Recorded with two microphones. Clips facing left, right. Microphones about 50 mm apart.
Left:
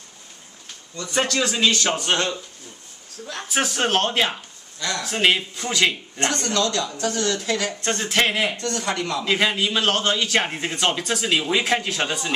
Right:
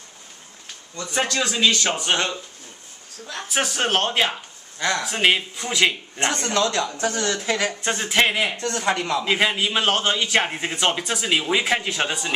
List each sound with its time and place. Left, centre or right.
1.0 s a man's voice: centre
4.7 s speech: right
5.0 s a man's voice: centre
6.2 s speech: right
7.8 s a man's voice: centre
8.5 s a man's voice: right; by 12.4 s centre